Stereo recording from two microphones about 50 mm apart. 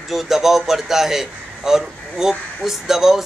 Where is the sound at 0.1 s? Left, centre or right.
Centre.